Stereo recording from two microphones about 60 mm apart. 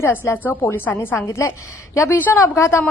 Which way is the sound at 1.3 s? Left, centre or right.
Left.